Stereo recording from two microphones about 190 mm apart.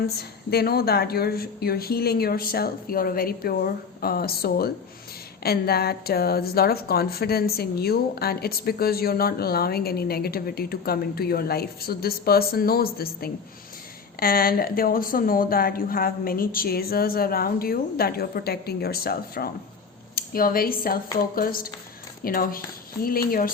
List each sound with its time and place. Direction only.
0.2 s a woman's voice: 55° left (ahead or behind)